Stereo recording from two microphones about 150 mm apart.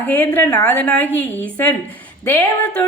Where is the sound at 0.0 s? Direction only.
15° left (ahead or behind).